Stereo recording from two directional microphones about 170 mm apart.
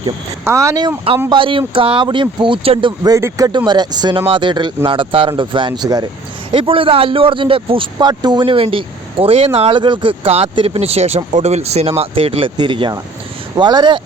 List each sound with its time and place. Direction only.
0.4 s speech: 20° right (ahead or behind)